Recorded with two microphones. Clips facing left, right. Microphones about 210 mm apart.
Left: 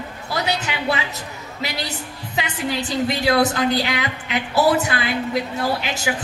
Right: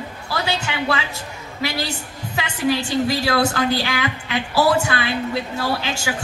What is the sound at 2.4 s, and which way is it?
A woman's voice, 20° left (ahead or behind).